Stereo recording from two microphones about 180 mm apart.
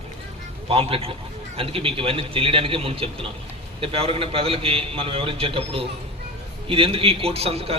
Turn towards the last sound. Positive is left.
turn(degrees=-35)  # may be behind; listen again after turning